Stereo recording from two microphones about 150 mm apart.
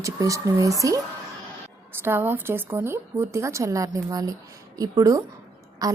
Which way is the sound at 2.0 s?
15° right (ahead or behind).